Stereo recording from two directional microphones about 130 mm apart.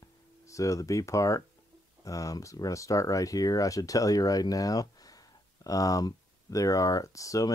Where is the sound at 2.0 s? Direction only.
25° left (ahead or behind).